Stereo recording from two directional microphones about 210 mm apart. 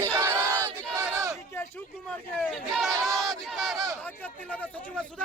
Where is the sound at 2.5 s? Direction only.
Centre (ahead or behind).